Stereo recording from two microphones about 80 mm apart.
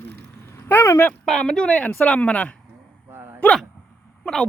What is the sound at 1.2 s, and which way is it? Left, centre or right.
Speech, centre.